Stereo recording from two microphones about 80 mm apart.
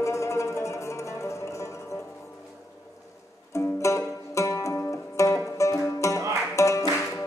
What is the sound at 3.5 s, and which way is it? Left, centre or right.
Music, left.